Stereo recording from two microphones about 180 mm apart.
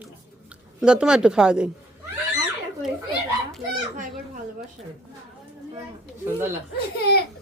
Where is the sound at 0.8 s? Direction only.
5° right (ahead or behind).